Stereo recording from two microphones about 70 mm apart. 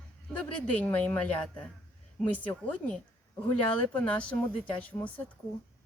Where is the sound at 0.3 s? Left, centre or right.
Left.